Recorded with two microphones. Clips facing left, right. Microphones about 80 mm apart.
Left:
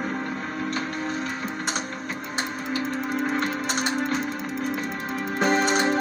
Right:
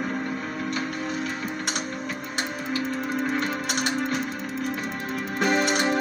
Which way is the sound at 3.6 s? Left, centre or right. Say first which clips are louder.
Left 1 dB; left.